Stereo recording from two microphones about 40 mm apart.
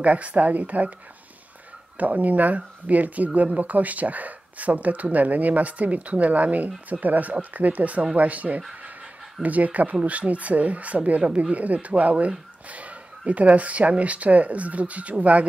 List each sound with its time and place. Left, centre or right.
0.0 s speech: right
2.0 s speech: right